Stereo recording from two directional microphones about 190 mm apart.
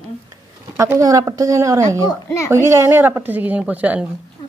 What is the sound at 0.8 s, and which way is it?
A woman's voice, 15° right (ahead or behind).